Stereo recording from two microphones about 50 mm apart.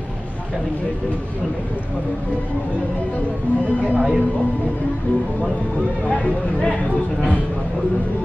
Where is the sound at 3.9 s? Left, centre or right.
Right.